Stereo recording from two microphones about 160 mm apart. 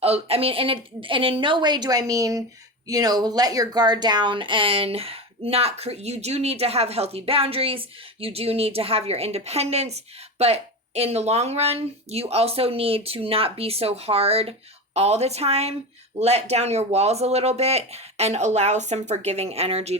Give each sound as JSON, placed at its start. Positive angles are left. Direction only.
{"t": 0.0, "sound": "speech", "side_deg": -40}